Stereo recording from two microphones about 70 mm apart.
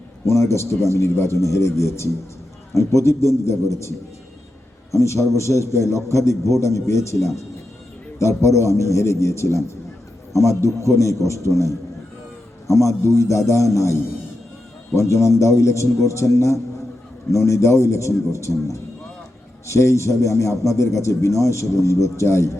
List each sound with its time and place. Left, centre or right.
0.3 s a man's voice: left